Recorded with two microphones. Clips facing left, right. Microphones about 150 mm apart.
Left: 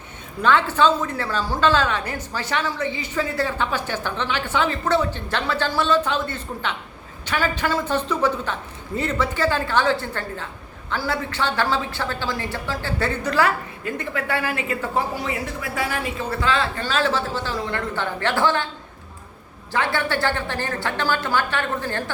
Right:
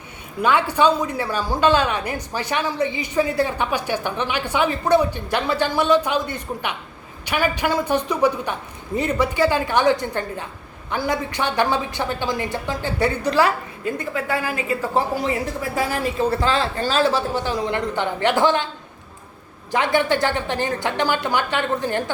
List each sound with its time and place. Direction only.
0.4 s a woman's voice: 15° right (ahead or behind)
14.9 s a woman's voice: 35° right (ahead or behind)
17.0 s a woman's voice: 10° right (ahead or behind)
19.7 s a woman's voice: 15° right (ahead or behind)